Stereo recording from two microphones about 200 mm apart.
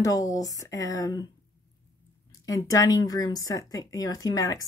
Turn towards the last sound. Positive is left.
turn(degrees=15)  # may be behind; listen again after turning